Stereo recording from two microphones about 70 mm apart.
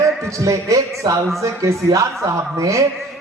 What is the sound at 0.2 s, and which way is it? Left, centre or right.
A man's voice, right.